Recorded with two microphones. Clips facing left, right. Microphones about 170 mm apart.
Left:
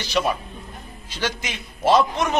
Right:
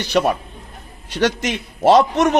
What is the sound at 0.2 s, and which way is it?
Speech, 50° right (ahead or behind).